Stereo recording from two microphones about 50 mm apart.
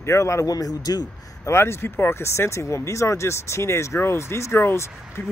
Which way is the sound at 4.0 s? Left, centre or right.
Left.